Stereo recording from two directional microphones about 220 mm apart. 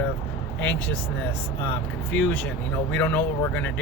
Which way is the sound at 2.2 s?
5° left (ahead or behind).